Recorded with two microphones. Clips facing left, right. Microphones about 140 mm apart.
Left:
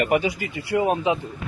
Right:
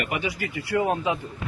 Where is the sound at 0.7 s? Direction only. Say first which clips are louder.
Left 3 dB; 20° left (ahead or behind).